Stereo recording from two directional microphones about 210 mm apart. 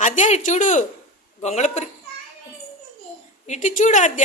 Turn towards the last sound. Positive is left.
turn(degrees=35)  # may be behind; listen again after turning